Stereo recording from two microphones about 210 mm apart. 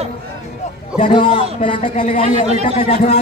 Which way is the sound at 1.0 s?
25° left (ahead or behind).